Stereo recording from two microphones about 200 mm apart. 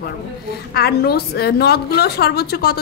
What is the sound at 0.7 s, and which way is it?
A woman's voice, 50° left (ahead or behind).